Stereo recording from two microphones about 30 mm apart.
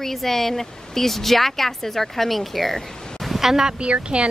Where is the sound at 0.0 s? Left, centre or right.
Centre.